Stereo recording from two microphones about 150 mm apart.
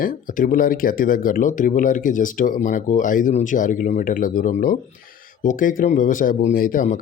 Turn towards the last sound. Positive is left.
turn(degrees=60)  # may be behind; listen again after turning